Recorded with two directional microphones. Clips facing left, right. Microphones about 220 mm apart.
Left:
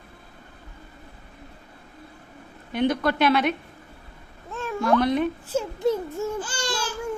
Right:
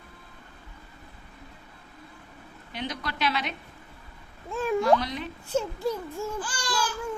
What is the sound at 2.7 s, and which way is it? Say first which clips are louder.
Speech: left 12 dB; 55° left (ahead or behind).